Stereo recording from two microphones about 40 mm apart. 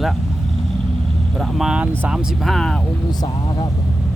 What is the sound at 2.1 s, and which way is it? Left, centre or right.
Speech, centre.